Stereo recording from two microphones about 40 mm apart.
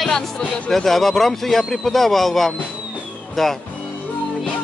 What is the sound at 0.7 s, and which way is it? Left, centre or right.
Speech, centre.